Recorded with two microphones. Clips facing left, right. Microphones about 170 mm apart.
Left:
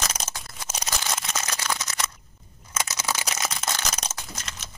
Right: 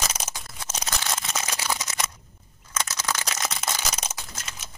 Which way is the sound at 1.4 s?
10° right (ahead or behind).